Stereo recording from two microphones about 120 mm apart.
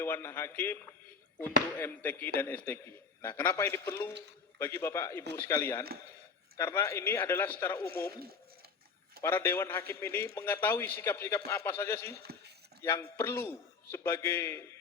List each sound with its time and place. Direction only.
0.0 s a man's voice: 20° left (ahead or behind)
9.2 s a man's voice: 20° left (ahead or behind)